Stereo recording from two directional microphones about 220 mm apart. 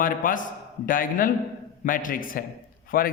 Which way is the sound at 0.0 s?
35° left (ahead or behind).